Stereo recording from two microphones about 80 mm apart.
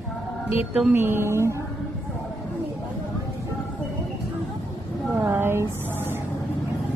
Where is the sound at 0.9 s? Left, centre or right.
Right.